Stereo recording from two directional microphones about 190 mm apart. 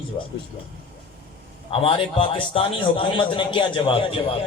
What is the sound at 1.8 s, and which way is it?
A man's voice, 25° left (ahead or behind).